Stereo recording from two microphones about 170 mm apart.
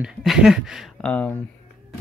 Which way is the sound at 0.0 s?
Centre (ahead or behind).